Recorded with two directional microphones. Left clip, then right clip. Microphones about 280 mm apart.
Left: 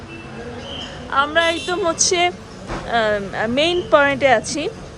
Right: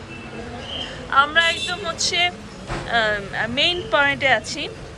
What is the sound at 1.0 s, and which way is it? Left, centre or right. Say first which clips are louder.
Speech: even; centre.